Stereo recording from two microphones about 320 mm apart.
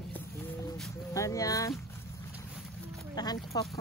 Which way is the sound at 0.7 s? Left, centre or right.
Centre.